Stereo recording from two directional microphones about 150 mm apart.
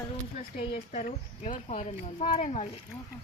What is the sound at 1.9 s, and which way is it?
Speech, 35° left (ahead or behind).